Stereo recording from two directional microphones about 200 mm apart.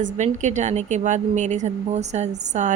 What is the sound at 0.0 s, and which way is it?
Speech, 35° right (ahead or behind).